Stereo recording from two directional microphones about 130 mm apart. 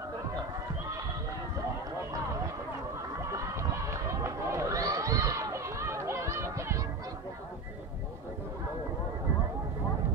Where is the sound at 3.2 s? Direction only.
25° right (ahead or behind).